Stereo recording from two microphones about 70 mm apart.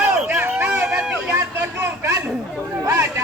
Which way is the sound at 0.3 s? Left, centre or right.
Centre.